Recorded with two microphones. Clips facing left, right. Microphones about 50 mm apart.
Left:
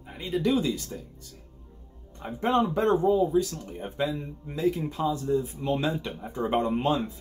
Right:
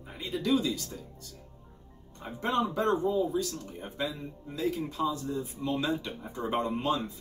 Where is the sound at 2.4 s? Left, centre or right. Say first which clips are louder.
Left 4 dB; left.